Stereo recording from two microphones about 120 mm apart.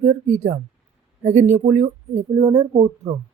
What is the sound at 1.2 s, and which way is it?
Speech, 75° right (ahead or behind).